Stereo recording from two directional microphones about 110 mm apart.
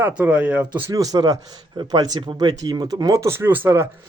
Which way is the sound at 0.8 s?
35° right (ahead or behind).